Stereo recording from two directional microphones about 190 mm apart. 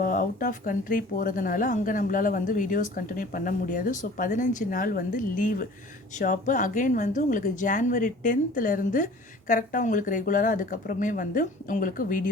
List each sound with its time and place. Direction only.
0.0 s speech: 45° left (ahead or behind)